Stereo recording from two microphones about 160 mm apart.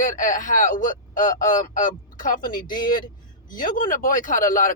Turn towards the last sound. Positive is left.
turn(degrees=55)  # may be behind; listen again after turning